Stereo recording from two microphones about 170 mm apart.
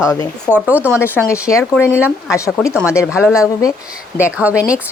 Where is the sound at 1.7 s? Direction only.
15° left (ahead or behind).